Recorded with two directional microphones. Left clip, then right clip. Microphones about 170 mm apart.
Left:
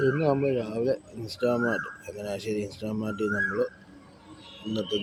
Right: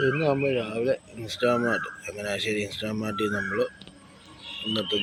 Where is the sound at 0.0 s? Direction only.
20° left (ahead or behind).